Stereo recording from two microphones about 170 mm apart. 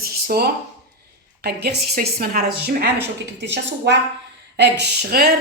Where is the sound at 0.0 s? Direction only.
65° right (ahead or behind).